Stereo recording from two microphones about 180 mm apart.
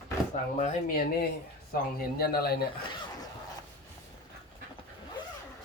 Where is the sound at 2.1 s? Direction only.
60° left (ahead or behind).